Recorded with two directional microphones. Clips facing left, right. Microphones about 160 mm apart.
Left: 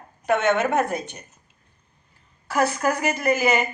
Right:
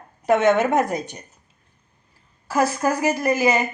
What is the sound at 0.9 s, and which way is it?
Speech, 35° right (ahead or behind).